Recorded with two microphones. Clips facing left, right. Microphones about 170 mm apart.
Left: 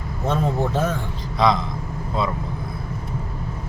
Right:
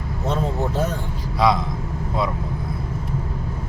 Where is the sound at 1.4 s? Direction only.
10° right (ahead or behind).